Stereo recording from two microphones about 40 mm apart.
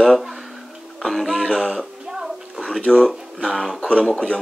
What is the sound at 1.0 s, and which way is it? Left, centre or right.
Speech, centre.